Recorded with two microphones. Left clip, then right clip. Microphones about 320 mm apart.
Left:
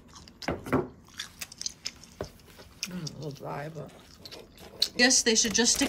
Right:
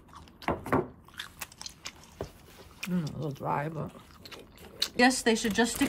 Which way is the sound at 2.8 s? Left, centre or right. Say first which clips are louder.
Right 2 dB; centre.